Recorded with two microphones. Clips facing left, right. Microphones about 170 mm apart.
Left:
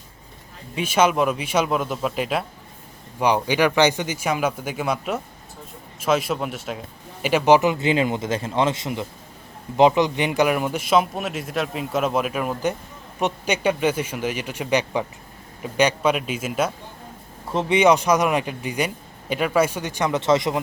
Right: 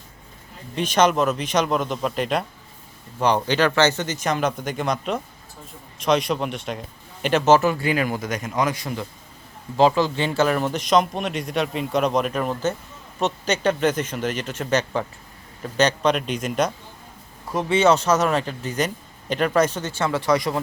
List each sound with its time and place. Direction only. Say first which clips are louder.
0.8 s a man's voice: even; 10° left (ahead or behind)
17.5 s a man's voice: left 1 dB; 20° left (ahead or behind)